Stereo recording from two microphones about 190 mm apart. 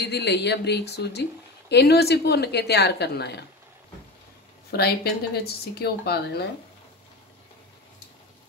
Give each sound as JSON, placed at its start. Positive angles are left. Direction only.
{"t": 0.0, "sound": "a woman's voice", "side_deg": 65}
{"t": 4.6, "sound": "a woman's voice", "side_deg": 55}